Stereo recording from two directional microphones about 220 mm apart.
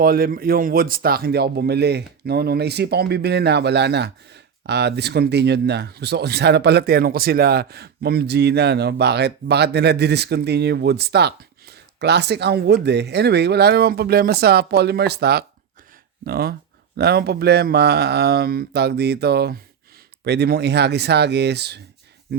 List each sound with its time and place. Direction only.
0.0 s speech: 40° right (ahead or behind)